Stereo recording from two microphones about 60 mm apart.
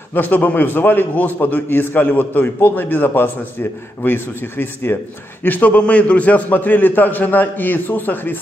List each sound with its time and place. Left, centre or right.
0.1 s a man's voice: left
5.4 s a man's voice: left